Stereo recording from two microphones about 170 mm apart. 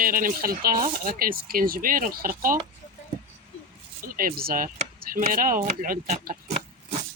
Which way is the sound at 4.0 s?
55° right (ahead or behind).